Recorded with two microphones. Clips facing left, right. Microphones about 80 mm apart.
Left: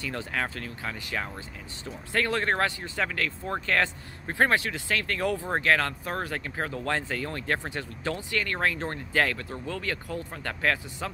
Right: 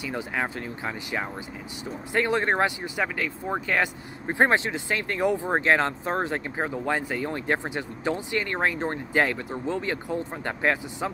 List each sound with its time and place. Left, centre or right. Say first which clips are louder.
0.0 s speech: right 2 dB; centre